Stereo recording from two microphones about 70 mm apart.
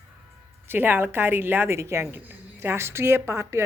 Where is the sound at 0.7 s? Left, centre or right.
Right.